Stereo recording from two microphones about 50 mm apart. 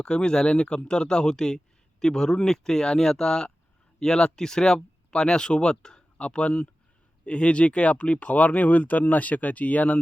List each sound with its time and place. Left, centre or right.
0.0 s speech: centre